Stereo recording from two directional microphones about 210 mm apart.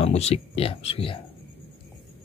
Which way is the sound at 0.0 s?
30° left (ahead or behind).